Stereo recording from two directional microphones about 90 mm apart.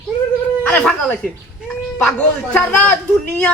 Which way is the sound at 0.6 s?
20° left (ahead or behind).